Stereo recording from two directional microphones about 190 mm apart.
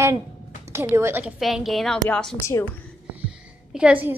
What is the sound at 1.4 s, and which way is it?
A woman's voice, centre (ahead or behind).